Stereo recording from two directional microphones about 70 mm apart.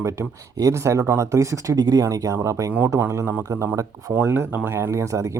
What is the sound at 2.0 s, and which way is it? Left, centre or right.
Speech, right.